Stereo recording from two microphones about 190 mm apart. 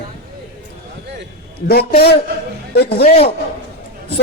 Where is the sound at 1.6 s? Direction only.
55° left (ahead or behind).